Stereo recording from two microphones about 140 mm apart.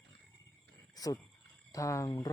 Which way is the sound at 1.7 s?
25° left (ahead or behind).